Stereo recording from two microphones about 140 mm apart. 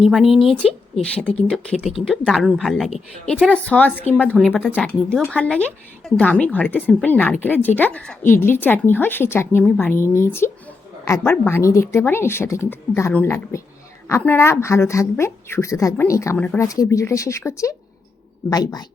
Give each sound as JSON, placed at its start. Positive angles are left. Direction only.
{"t": 0.0, "sound": "a woman's voice", "side_deg": 0}
{"t": 1.5, "sound": "a woman's voice", "side_deg": 0}
{"t": 3.5, "sound": "a woman's voice", "side_deg": 10}